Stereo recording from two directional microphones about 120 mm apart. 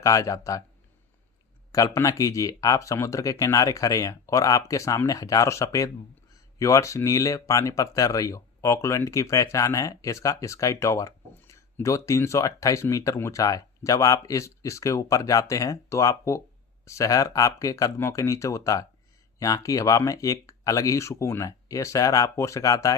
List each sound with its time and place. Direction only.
0.0 s speech: 30° left (ahead or behind)
1.7 s speech: 25° left (ahead or behind)